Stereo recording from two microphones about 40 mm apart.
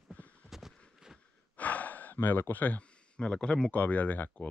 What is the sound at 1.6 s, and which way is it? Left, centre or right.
Gasp, left.